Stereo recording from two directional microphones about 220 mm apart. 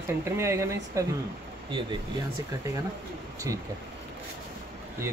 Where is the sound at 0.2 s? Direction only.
10° right (ahead or behind).